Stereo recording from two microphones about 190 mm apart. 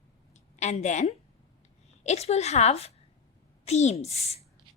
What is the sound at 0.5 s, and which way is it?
A woman's voice, 35° left (ahead or behind).